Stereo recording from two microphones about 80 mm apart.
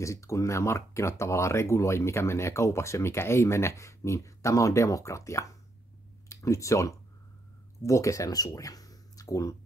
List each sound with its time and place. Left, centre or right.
0.0 s speech: left